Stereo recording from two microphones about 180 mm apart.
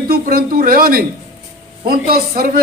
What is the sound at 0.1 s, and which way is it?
A man's voice, 55° right (ahead or behind).